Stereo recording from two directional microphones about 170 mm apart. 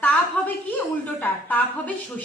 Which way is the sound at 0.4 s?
10° left (ahead or behind).